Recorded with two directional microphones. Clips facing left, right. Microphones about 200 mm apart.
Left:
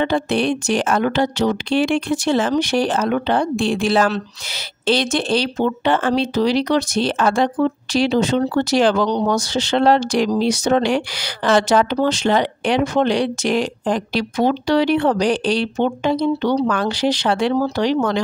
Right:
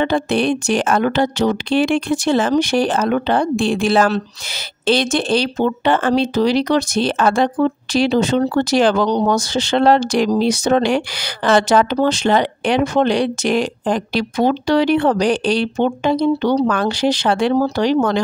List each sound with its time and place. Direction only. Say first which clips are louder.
0.0 s speech: right 1 dB; 50° right (ahead or behind)